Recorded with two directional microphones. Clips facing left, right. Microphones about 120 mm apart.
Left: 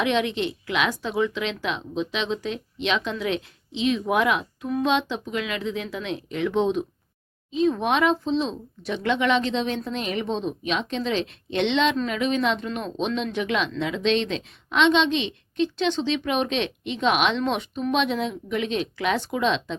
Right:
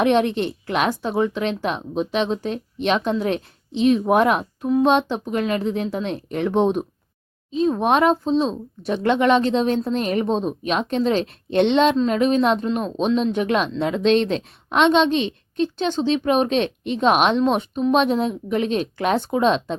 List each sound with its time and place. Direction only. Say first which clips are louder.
0.0 s speech: right 5 dB; 50° right (ahead or behind)
7.5 s speech: right 3 dB; 40° right (ahead or behind)